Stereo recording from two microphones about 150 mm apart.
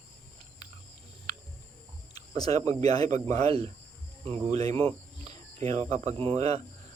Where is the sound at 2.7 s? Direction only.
45° right (ahead or behind).